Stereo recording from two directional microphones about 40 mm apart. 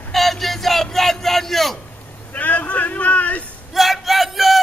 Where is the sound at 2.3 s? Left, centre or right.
Left.